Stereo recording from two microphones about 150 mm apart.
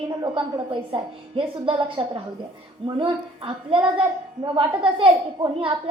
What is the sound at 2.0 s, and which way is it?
Speech, 40° right (ahead or behind).